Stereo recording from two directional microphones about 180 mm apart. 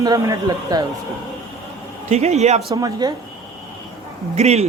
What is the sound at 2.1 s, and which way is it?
Speech, 35° right (ahead or behind).